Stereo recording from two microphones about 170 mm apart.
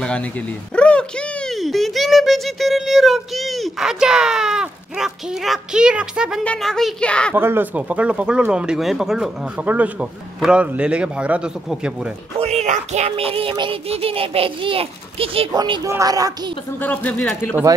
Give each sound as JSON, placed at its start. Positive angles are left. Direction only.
{"t": 0.0, "sound": "speech", "side_deg": 5}
{"t": 6.4, "sound": "a woman's voice", "side_deg": 5}
{"t": 7.3, "sound": "speech", "side_deg": -10}
{"t": 12.4, "sound": "music", "side_deg": -40}
{"t": 15.9, "sound": "speech", "side_deg": -20}
{"t": 16.8, "sound": "speech", "side_deg": 10}